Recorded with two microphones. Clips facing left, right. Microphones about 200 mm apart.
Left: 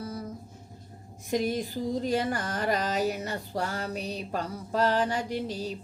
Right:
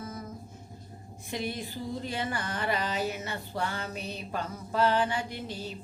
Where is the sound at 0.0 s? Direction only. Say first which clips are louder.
Left 3 dB; 35° left (ahead or behind).